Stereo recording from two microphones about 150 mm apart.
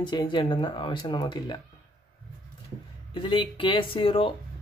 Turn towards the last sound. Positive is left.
turn(degrees=35)  # may be behind; listen again after turning